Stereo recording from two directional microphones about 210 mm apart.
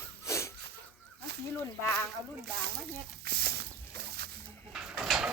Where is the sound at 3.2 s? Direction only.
50° right (ahead or behind).